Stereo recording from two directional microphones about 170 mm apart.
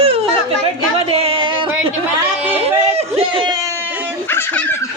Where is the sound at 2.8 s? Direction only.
35° right (ahead or behind).